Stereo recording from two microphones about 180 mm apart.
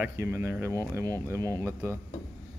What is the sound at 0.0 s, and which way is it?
Speech, 15° right (ahead or behind).